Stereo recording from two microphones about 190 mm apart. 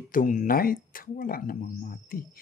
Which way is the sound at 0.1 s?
45° left (ahead or behind).